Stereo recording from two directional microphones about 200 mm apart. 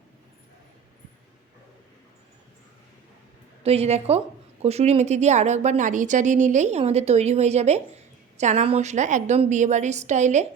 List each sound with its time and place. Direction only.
3.6 s a woman's voice: 30° right (ahead or behind)